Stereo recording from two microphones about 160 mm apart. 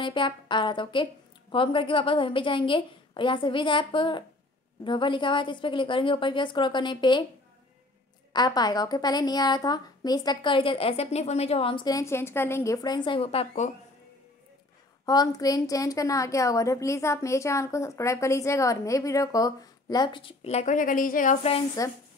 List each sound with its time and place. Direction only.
0.0 s a woman's voice: 30° left (ahead or behind)
8.3 s a woman's voice: 25° left (ahead or behind)
15.0 s a woman's voice: 25° left (ahead or behind); by 21.5 s 55° left (ahead or behind)
21.8 s a woman's voice: 20° left (ahead or behind)